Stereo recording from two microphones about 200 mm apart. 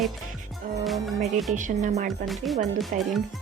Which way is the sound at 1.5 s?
40° right (ahead or behind).